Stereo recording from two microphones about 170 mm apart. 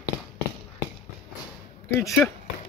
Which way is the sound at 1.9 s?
15° left (ahead or behind).